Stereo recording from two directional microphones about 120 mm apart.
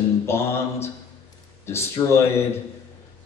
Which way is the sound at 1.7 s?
20° left (ahead or behind).